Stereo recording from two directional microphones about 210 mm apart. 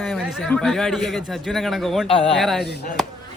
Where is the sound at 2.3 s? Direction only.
Centre (ahead or behind).